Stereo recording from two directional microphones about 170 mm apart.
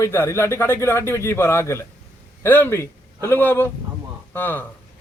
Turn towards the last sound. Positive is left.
turn(degrees=10)  # may be behind; listen again after turning